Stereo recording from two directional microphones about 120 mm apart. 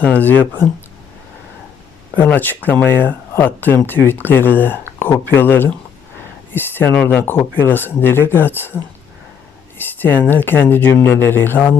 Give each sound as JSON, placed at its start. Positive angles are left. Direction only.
{"t": 0.0, "sound": "speech", "side_deg": 15}
{"t": 2.1, "sound": "speech", "side_deg": 15}
{"t": 9.7, "sound": "speech", "side_deg": 15}